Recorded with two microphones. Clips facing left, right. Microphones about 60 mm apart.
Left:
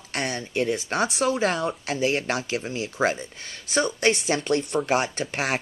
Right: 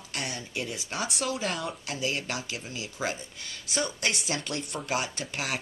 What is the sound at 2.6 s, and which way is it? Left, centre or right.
A woman's voice, left.